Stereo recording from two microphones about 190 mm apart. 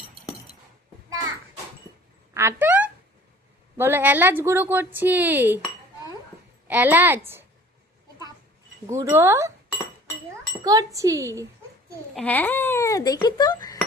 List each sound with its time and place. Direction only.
2.3 s speech: 15° right (ahead or behind)
6.7 s speech: 10° right (ahead or behind)
8.9 s speech: 15° right (ahead or behind)
10.6 s speech: 20° right (ahead or behind)
12.1 s speech: 5° left (ahead or behind)